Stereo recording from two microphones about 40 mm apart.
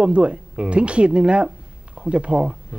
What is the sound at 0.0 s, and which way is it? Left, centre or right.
Speech, right.